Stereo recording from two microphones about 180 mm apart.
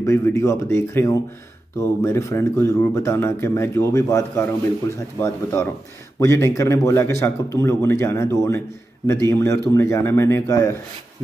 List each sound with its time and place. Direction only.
0.0 s speech: 15° left (ahead or behind)